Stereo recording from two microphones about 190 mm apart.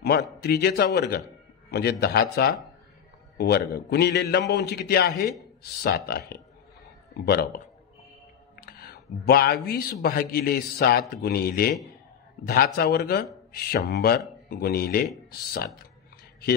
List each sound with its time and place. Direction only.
0.0 s a man's voice: 55° left (ahead or behind)